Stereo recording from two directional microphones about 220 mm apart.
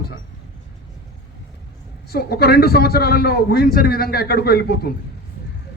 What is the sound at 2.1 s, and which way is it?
A man's voice, 45° left (ahead or behind).